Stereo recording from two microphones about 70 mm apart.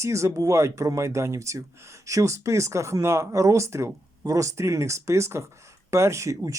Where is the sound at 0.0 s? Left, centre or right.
Right.